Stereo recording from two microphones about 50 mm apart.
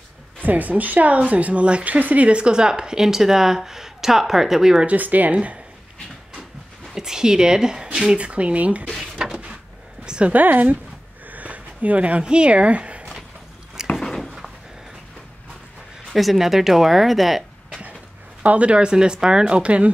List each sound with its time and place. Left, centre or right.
0.4 s a woman's voice: right; by 4.8 s centre
4.8 s a woman's voice: right
7.0 s a woman's voice: centre; by 8.8 s right
10.0 s a sound: centre
10.3 s a woman's voice: right
11.2 s a sound: right
13.9 s a sound: centre
16.1 s speech: centre
18.4 s speech: right